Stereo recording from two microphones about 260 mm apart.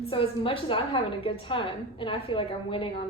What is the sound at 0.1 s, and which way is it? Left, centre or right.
A woman's voice, left.